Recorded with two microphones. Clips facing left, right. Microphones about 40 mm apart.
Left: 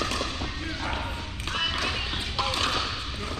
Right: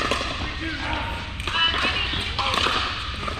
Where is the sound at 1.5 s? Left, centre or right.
Right.